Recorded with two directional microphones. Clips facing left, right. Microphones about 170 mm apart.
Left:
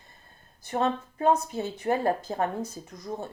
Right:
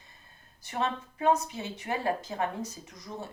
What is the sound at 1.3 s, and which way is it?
Speech, 50° left (ahead or behind).